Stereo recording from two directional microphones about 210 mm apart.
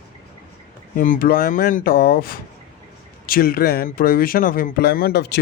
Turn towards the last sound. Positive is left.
turn(degrees=50)  # may be behind; listen again after turning